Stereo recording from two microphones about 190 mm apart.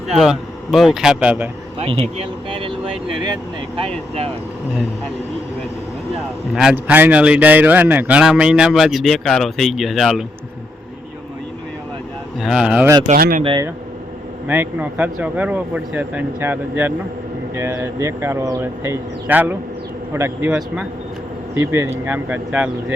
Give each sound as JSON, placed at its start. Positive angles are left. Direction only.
{"t": 0.2, "sound": "speech", "side_deg": 0}
{"t": 1.8, "sound": "speech", "side_deg": -30}
{"t": 6.5, "sound": "speech", "side_deg": -5}
{"t": 12.4, "sound": "speech", "side_deg": -5}
{"t": 13.1, "sound": "speech", "side_deg": -50}
{"t": 13.4, "sound": "speech", "side_deg": -25}
{"t": 14.4, "sound": "speech", "side_deg": -10}